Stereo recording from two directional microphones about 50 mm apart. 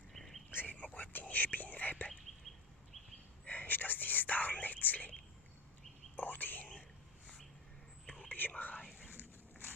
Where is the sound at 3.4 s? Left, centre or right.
Left.